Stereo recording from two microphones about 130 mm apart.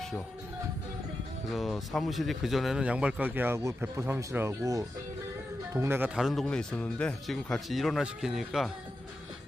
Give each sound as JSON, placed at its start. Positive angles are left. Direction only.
{"t": 1.5, "sound": "speech", "side_deg": 0}
{"t": 6.1, "sound": "speech", "side_deg": 0}